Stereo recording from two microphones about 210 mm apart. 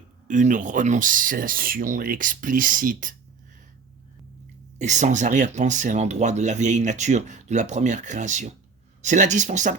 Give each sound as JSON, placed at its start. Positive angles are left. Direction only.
{"t": 0.3, "sound": "speech", "side_deg": -35}
{"t": 4.8, "sound": "speech", "side_deg": -35}